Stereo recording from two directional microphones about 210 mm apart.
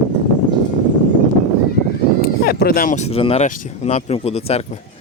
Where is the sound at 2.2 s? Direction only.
45° left (ahead or behind); by 4.8 s 30° left (ahead or behind).